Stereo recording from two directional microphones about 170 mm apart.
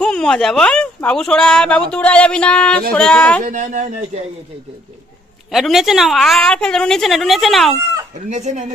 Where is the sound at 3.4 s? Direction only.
50° right (ahead or behind).